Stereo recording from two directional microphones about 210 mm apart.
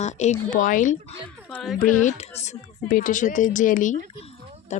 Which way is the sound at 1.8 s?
40° left (ahead or behind).